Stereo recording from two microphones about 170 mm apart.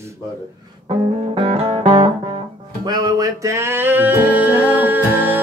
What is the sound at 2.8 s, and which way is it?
Music, 20° right (ahead or behind).